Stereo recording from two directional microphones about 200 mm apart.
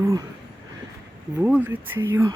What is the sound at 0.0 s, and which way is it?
Speech, 15° right (ahead or behind).